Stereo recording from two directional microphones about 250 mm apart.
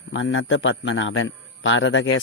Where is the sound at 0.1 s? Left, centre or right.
Left.